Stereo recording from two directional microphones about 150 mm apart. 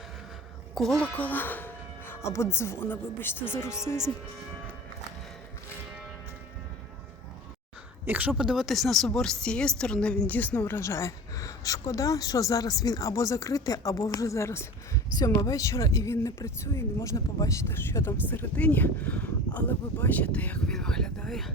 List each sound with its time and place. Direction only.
0.7 s speech: centre (ahead or behind)
8.0 s speech: 10° right (ahead or behind)